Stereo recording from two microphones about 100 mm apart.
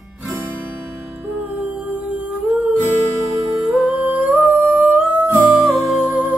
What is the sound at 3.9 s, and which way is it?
Music, 15° right (ahead or behind).